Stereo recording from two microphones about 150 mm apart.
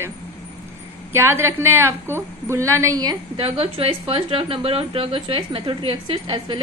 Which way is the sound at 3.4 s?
40° right (ahead or behind).